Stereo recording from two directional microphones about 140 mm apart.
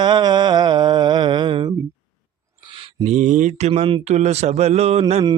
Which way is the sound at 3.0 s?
55° right (ahead or behind).